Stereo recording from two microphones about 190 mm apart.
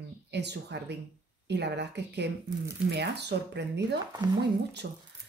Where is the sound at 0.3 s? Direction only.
65° right (ahead or behind).